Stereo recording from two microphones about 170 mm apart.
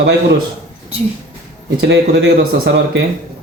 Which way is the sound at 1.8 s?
85° right.